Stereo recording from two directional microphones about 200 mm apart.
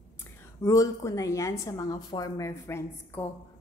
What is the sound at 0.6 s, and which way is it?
Speech, 15° left (ahead or behind).